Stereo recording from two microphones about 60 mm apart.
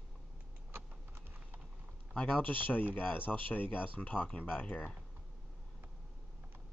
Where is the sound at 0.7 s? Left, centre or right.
Right.